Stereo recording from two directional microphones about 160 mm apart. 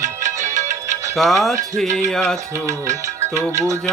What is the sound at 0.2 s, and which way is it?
Music, 50° right (ahead or behind).